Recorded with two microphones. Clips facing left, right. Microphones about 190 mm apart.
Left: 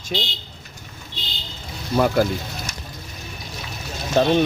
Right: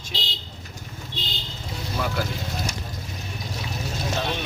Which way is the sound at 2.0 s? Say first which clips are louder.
Left 10 dB; 55° left (ahead or behind).